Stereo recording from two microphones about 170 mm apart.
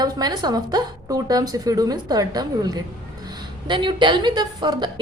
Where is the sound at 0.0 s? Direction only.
25° right (ahead or behind).